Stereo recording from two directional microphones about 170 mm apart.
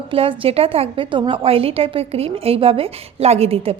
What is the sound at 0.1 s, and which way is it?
A woman's voice, 35° right (ahead or behind).